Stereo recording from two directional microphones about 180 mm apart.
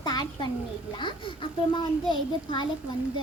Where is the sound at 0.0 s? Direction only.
25° left (ahead or behind).